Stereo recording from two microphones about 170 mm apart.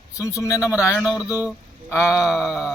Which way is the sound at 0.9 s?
5° right (ahead or behind).